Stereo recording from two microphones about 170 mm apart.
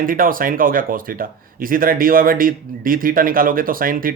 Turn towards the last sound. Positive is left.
turn(degrees=-55)  # may be behind; listen again after turning